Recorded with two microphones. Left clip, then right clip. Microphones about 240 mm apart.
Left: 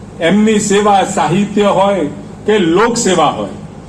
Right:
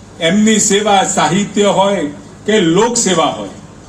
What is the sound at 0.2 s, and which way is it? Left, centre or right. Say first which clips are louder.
A man's voice: left 1 dB; right.